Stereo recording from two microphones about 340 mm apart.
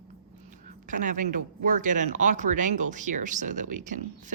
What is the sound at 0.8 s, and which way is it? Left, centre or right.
Speech, right.